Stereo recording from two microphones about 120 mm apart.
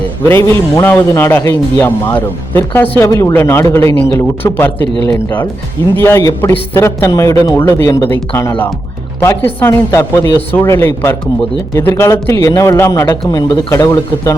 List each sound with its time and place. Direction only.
0.3 s a man's voice: 20° left (ahead or behind)
3.1 s a man's voice: 30° left (ahead or behind)
6.0 s a man's voice: 20° left (ahead or behind)